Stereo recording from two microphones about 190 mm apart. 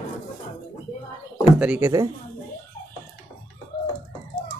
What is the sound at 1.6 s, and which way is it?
Speech, 5° right (ahead or behind).